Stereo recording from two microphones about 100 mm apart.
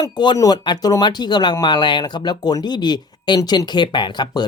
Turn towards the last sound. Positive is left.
turn(degrees=45)  # may be behind; listen again after turning